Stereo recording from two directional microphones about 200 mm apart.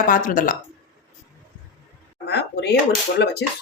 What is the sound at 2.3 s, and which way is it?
Speech, 55° left (ahead or behind).